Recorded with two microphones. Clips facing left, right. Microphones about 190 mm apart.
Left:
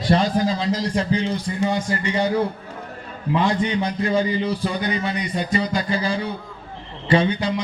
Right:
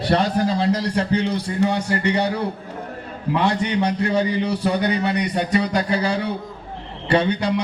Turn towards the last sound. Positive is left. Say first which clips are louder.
# even
turn(degrees=-65)  # may be behind; listen again after turning